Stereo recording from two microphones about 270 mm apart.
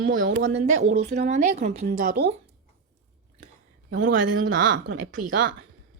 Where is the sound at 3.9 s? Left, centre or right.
Right.